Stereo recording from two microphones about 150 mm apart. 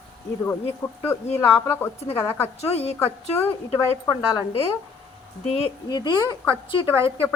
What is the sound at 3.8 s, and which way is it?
Speech, 25° left (ahead or behind).